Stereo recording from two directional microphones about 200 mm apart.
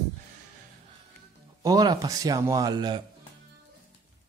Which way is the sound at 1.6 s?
20° right (ahead or behind).